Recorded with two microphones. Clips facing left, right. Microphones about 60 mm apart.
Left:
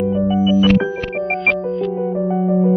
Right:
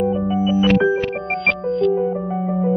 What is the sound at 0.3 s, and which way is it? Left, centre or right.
Music, right.